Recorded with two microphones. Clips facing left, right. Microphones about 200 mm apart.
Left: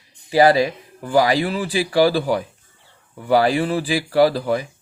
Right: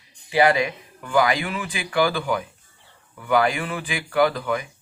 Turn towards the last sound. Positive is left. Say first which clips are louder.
# left 4 dB
turn(degrees=35)  # may be behind; listen again after turning